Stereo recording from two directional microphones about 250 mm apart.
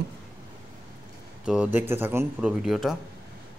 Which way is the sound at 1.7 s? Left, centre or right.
Centre.